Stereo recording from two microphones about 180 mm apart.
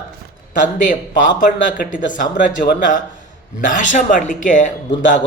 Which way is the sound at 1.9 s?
45° left (ahead or behind).